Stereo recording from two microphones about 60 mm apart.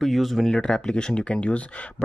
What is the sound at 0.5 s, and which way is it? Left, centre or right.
Speech, centre.